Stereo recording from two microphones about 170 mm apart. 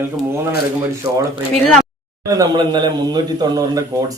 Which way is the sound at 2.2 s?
25° right (ahead or behind).